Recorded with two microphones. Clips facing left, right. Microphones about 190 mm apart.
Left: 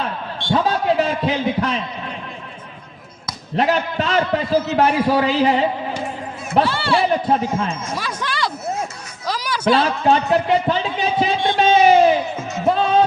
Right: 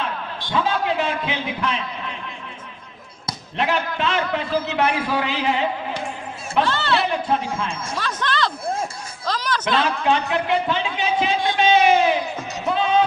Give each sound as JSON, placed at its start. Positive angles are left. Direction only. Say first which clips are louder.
{"t": 0.5, "sound": "a man's voice", "louder": "left 4 dB", "side_deg": 40}
{"t": 3.5, "sound": "a man's voice", "louder": "left 5 dB", "side_deg": 40}
{"t": 6.7, "sound": "speech", "louder": "left 3 dB", "side_deg": 10}
{"t": 7.1, "sound": "a man's voice", "louder": "left 4 dB", "side_deg": 40}
{"t": 7.9, "sound": "speech", "louder": "right 1 dB", "side_deg": 10}
{"t": 9.2, "sound": "music", "louder": "left 4 dB", "side_deg": 10}
{"t": 9.8, "sound": "a man's voice", "louder": "left 3 dB", "side_deg": 35}
{"t": 11.6, "sound": "a sound", "louder": "left 4 dB", "side_deg": 40}
{"t": 12.6, "sound": "music", "louder": "left 3 dB", "side_deg": 40}